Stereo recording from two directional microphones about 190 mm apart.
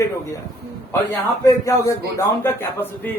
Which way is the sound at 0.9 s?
15° left (ahead or behind).